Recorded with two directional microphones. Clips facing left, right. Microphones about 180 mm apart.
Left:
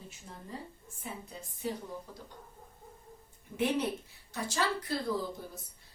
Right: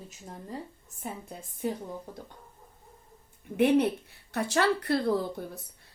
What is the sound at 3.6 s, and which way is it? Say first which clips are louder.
A woman's voice: right 8 dB; 60° right (ahead or behind).